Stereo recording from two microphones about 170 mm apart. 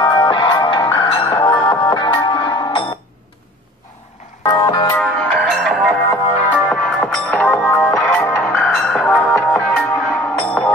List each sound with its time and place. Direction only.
0.0 s music: 20° left (ahead or behind)
4.5 s music: 20° left (ahead or behind)
5.0 s music: 5° left (ahead or behind)